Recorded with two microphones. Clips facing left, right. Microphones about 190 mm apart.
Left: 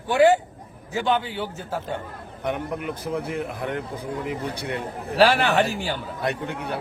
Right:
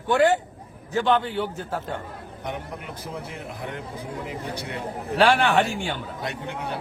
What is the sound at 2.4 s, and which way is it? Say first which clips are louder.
A man's voice: left 7 dB; 60° left (ahead or behind).